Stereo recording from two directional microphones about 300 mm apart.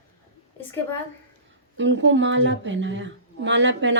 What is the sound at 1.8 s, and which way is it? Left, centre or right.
A woman's voice, right.